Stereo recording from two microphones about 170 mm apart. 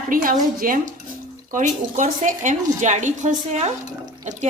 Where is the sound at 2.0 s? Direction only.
50° right (ahead or behind).